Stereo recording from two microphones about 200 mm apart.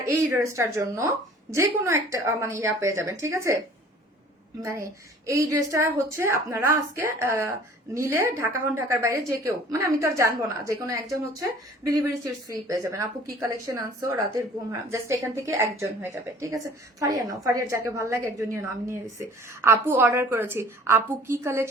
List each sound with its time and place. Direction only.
0.0 s a woman's voice: 15° right (ahead or behind)
4.6 s a woman's voice: 15° right (ahead or behind)